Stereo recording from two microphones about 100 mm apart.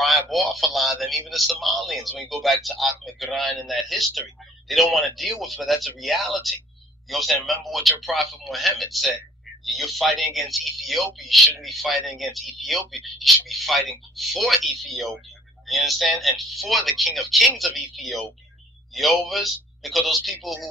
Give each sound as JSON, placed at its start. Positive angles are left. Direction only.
{"t": 0.0, "sound": "a man's voice", "side_deg": 0}